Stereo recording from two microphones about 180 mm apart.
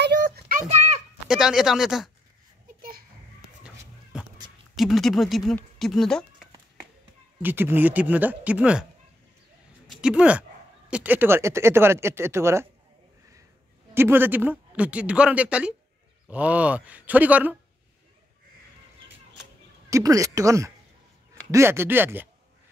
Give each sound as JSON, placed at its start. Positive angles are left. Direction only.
{"t": 0.0, "sound": "a sound", "side_deg": -65}
{"t": 0.6, "sound": "a sound", "side_deg": -35}
{"t": 1.3, "sound": "speech", "side_deg": -5}
{"t": 3.6, "sound": "a sound", "side_deg": -5}
{"t": 4.7, "sound": "speech", "side_deg": 0}
{"t": 7.4, "sound": "speech", "side_deg": -10}
{"t": 9.8, "sound": "speech", "side_deg": -5}
{"t": 13.9, "sound": "speech", "side_deg": -10}
{"t": 19.9, "sound": "speech", "side_deg": -20}